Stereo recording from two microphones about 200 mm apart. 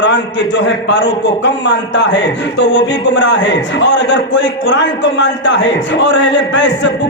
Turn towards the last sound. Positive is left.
turn(degrees=65)  # may be behind; listen again after turning